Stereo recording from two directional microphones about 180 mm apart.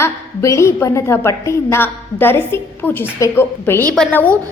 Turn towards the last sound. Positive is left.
turn(degrees=10)  # may be behind; listen again after turning